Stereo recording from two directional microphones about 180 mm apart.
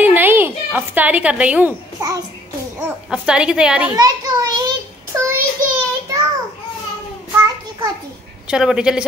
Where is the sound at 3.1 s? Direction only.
5° right (ahead or behind).